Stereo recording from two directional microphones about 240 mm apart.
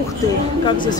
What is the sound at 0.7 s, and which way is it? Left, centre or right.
Speech, centre.